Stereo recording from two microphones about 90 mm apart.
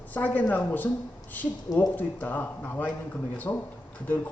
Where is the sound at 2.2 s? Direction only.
20° left (ahead or behind).